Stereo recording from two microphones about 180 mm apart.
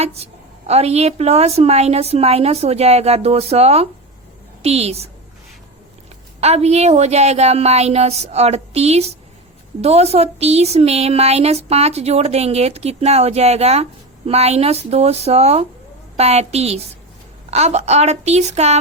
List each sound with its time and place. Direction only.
0.7 s speech: 35° right (ahead or behind)
6.4 s speech: 35° right (ahead or behind)